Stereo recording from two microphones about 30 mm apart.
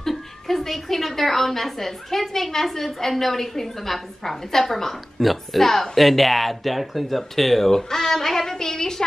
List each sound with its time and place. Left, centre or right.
0.5 s a woman's voice: centre